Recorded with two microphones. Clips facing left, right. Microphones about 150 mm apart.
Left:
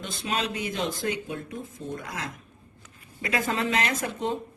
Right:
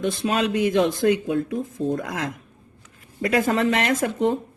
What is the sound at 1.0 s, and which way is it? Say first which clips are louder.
Speech: right 11 dB; 75° right (ahead or behind).